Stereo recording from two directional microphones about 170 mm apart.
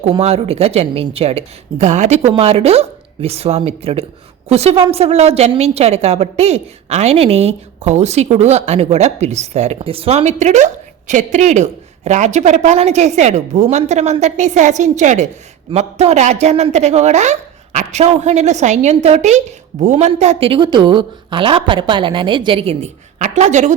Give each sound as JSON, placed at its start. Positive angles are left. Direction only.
{"t": 0.2, "sound": "a woman's voice", "side_deg": -35}